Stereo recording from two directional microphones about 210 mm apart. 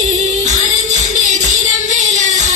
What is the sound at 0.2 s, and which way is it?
Music, 35° right (ahead or behind).